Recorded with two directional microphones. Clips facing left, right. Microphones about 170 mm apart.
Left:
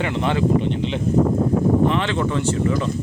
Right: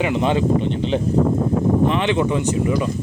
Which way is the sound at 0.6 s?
35° right (ahead or behind).